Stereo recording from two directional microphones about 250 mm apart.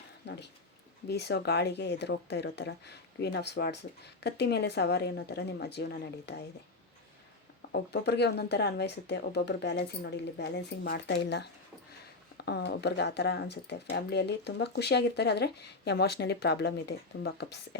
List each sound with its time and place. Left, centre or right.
0.2 s speech: left
7.7 s speech: left